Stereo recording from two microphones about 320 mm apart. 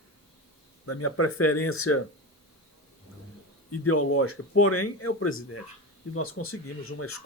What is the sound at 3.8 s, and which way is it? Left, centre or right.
Speech, left.